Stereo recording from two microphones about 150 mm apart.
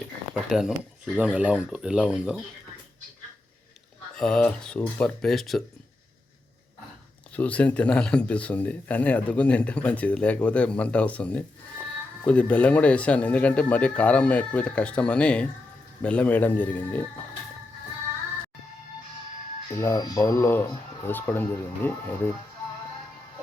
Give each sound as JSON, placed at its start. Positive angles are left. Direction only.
{"t": 0.4, "sound": "speech", "side_deg": -5}
{"t": 4.2, "sound": "speech", "side_deg": 5}
{"t": 7.3, "sound": "speech", "side_deg": 10}
{"t": 19.8, "sound": "speech", "side_deg": 25}